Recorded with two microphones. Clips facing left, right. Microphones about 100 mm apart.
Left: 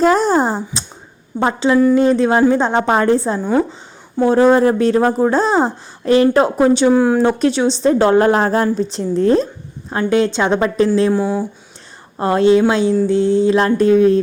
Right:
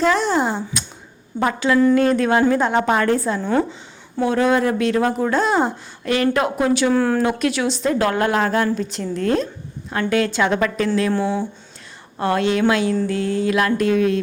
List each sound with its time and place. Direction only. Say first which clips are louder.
0.0 s a sound: left 5 dB; 40° left (ahead or behind)
1.4 s a woman's voice: left 3 dB; 25° left (ahead or behind)
6.9 s speech: left 5 dB; 15° left (ahead or behind)
7.2 s a woman's voice: left 5 dB; 30° left (ahead or behind)
11.1 s speech: left 4 dB; 5° left (ahead or behind)
12.2 s a woman's voice: left 6 dB; 30° left (ahead or behind)